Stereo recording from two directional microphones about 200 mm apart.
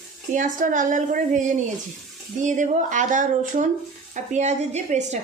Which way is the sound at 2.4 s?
40° right (ahead or behind).